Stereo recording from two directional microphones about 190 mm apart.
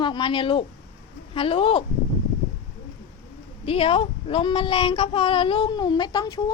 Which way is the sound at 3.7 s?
30° left (ahead or behind).